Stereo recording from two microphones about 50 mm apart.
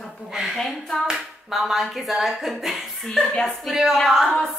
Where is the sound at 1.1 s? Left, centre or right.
Centre.